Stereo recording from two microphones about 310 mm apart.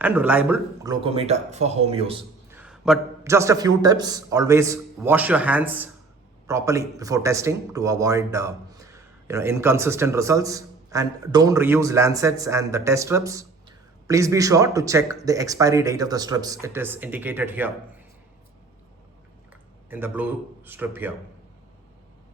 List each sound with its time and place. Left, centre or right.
0.0 s speech: centre
2.5 s speech: centre
19.9 s speech: centre